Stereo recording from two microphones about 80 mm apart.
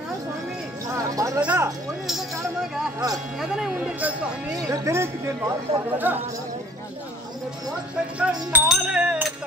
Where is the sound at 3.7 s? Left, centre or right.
Centre.